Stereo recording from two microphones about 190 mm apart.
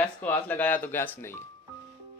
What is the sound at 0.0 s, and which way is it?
A man's voice, 10° left (ahead or behind).